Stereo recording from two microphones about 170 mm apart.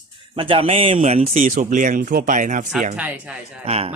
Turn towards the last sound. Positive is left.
turn(degrees=-35)  # may be behind; listen again after turning